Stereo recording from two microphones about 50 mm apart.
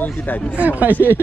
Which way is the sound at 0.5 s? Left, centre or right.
Right.